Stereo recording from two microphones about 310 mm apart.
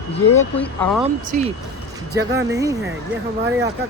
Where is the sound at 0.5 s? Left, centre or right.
Centre.